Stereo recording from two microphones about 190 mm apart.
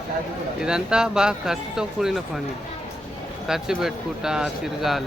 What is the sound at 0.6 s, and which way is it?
Speech, 5° right (ahead or behind).